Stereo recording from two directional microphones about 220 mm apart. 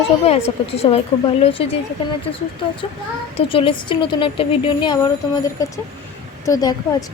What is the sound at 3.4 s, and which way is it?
A woman's voice, 25° left (ahead or behind).